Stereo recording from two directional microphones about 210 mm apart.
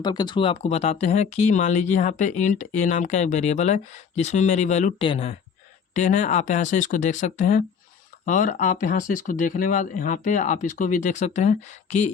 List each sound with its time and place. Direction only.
0.0 s speech: 20° left (ahead or behind)